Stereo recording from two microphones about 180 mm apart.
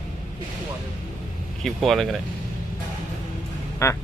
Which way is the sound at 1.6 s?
Centre (ahead or behind).